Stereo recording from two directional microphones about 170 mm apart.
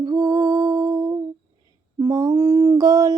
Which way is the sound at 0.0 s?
25° right (ahead or behind).